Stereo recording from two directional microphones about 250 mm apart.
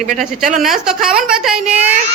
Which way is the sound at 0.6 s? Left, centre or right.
Centre.